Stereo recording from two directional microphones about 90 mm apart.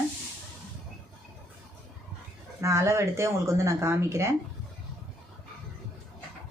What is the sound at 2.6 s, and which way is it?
Speech, 35° right (ahead or behind).